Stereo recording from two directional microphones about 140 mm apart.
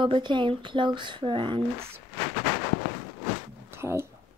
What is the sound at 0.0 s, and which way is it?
Speech, 35° right (ahead or behind).